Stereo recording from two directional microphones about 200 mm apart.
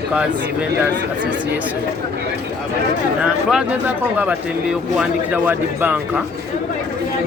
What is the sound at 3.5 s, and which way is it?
Speech, 5° right (ahead or behind).